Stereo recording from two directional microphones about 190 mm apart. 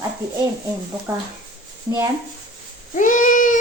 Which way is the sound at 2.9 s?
40° left (ahead or behind).